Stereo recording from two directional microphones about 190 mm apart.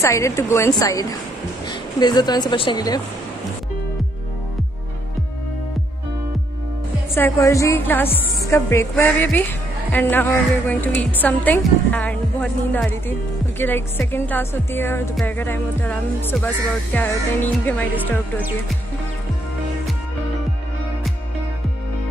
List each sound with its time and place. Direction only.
0.0 s a woman's voice: 15° left (ahead or behind)
7.2 s a woman's voice: 15° left (ahead or behind)